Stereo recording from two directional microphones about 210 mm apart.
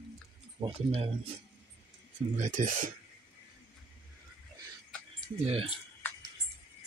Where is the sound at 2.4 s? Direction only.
40° right (ahead or behind).